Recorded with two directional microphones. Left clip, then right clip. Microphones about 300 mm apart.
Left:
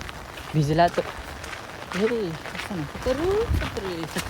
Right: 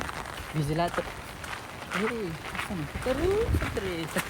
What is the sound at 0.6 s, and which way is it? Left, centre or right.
Speech, left.